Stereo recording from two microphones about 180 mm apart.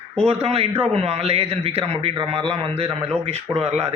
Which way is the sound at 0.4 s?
35° right (ahead or behind).